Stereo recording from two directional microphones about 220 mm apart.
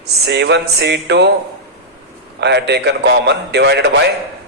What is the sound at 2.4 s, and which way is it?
A man's voice, 50° right (ahead or behind).